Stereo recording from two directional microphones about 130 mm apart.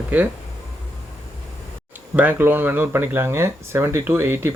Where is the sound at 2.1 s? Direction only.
15° right (ahead or behind).